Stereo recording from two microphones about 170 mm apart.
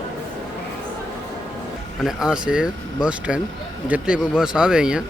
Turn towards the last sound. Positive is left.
turn(degrees=-5)  # may be behind; listen again after turning